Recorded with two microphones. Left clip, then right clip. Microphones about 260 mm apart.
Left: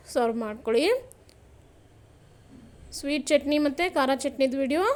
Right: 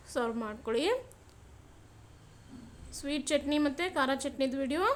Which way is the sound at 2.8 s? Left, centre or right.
Centre.